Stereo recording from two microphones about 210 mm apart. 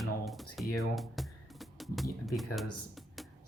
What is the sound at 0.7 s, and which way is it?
Music, centre (ahead or behind).